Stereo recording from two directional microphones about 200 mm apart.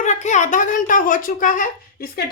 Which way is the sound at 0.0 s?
35° left (ahead or behind).